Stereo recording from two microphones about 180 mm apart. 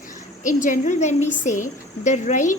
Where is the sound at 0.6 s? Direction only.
45° left (ahead or behind).